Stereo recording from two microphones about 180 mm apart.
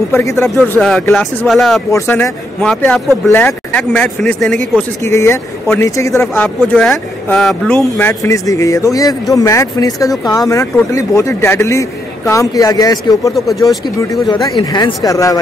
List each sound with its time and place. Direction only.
0.1 s speech: 15° left (ahead or behind)
0.7 s speech: 5° left (ahead or behind)
1.9 s speech: 15° left (ahead or behind)
4.7 s speech: 15° left (ahead or behind)
6.2 s speech: 5° left (ahead or behind)